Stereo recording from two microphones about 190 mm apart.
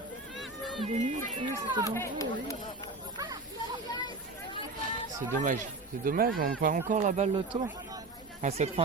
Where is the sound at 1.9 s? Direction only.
15° left (ahead or behind).